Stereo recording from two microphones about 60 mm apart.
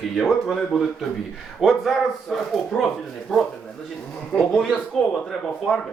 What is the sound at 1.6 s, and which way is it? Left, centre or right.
Speech, centre.